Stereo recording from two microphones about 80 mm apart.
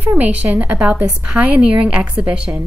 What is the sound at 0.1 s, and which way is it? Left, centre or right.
Speech, centre.